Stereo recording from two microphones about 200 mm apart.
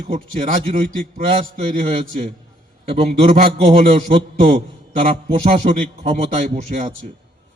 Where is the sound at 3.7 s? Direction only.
45° right (ahead or behind).